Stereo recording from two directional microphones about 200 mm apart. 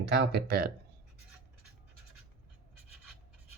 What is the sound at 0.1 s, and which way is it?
Speech, 55° right (ahead or behind).